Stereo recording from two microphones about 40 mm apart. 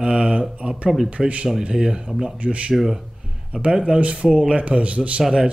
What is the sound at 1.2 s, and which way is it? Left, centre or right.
Speech, centre.